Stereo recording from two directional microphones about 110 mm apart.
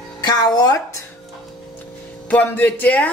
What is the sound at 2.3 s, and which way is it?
Speech, 15° left (ahead or behind).